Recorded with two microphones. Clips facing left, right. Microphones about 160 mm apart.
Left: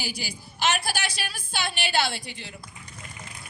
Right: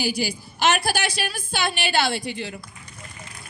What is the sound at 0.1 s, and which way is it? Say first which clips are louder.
A woman's voice: right 10 dB; 90° right.